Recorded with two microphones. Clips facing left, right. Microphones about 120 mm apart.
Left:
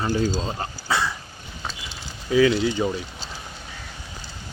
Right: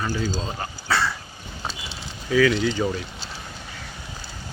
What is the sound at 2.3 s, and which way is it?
Speech, 25° left (ahead or behind).